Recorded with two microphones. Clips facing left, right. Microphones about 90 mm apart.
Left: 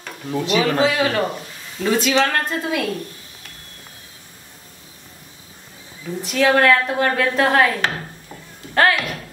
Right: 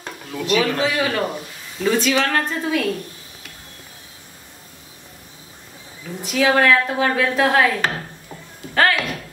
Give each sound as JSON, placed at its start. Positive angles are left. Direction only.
{"t": 0.3, "sound": "speech", "side_deg": 15}
{"t": 0.8, "sound": "speech", "side_deg": 0}
{"t": 6.2, "sound": "a woman's voice", "side_deg": 0}